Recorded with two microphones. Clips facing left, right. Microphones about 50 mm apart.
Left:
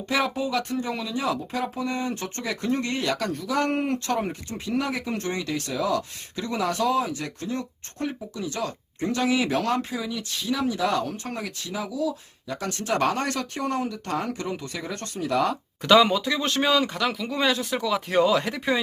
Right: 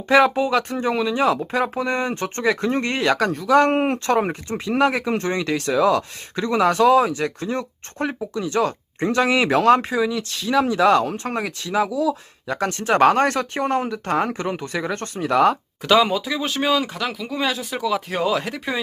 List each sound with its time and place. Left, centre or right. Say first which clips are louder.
0.1 s speech: right 9 dB; right
8.4 s speech: right 9 dB; right
10.0 s speech: right 9 dB; right
15.9 s speech: right 1 dB; centre